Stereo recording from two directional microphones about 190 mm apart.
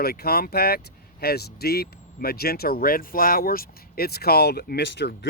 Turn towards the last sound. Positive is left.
turn(degrees=65)  # may be behind; listen again after turning